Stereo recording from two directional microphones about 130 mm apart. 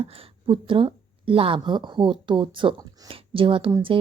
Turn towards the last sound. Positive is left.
turn(degrees=-45)  # may be behind; listen again after turning